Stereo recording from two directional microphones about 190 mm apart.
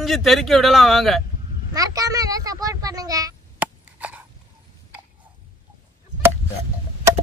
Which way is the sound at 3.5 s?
10° right (ahead or behind).